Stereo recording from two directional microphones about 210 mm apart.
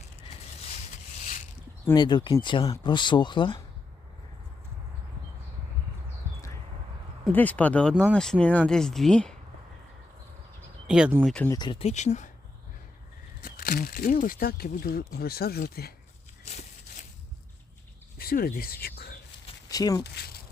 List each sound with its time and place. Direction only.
1.9 s speech: 20° left (ahead or behind)
7.3 s speech: 5° left (ahead or behind)
10.8 s speech: 5° right (ahead or behind)
11.3 s speech: 15° left (ahead or behind); by 12.3 s 35° left (ahead or behind)
13.4 s speech: 45° left (ahead or behind)
18.2 s speech: 45° left (ahead or behind)
19.6 s speech: 15° left (ahead or behind)